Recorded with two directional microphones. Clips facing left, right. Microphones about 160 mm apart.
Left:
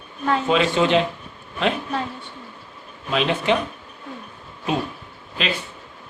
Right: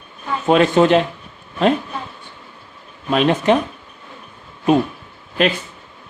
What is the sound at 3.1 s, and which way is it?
Speech, 45° right (ahead or behind).